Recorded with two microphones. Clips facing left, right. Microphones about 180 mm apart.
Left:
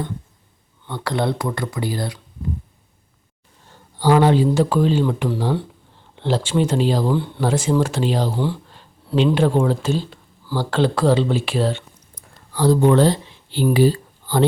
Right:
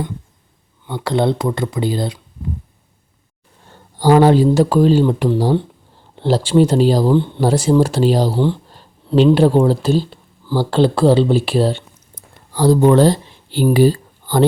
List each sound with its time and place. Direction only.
0.9 s speech: 20° right (ahead or behind)
3.9 s speech: 40° right (ahead or behind)